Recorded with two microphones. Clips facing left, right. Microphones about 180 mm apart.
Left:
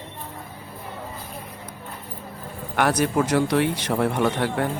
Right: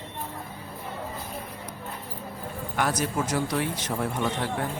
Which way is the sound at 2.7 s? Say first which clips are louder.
Left 6 dB; 65° left (ahead or behind).